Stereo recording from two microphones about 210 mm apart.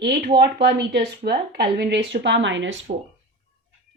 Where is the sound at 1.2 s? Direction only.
50° right (ahead or behind).